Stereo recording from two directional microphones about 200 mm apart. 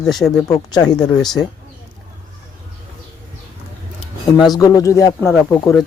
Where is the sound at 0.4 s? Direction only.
20° left (ahead or behind).